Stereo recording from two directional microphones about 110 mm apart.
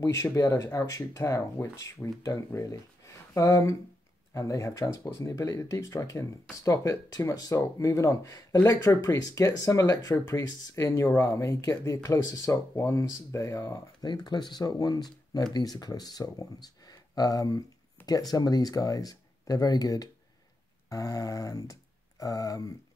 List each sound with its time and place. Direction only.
0.0 s speech: 25° left (ahead or behind)
14.0 s speech: 40° left (ahead or behind)